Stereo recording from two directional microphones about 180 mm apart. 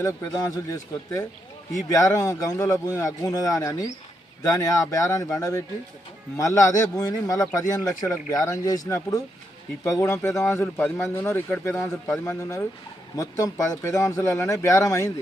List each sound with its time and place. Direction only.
0.0 s speech: 20° left (ahead or behind)